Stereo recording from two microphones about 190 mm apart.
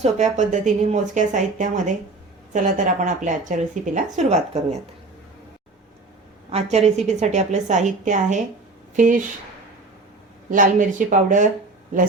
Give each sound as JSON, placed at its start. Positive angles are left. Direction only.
{"t": 0.0, "sound": "a woman's voice", "side_deg": -40}
{"t": 6.5, "sound": "a woman's voice", "side_deg": -35}
{"t": 10.5, "sound": "speech", "side_deg": -45}